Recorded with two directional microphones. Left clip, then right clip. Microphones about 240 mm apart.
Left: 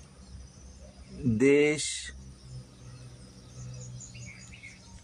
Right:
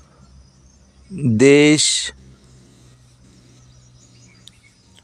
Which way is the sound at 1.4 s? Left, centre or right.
Right.